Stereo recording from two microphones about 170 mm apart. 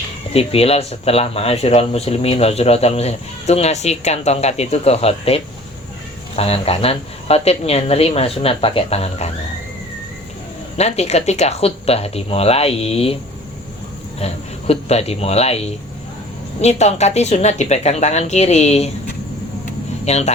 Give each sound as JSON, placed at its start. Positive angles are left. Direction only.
{"t": 0.3, "sound": "speech", "side_deg": 35}
{"t": 10.8, "sound": "speech", "side_deg": 40}
{"t": 14.2, "sound": "speech", "side_deg": 35}
{"t": 20.1, "sound": "speech", "side_deg": 40}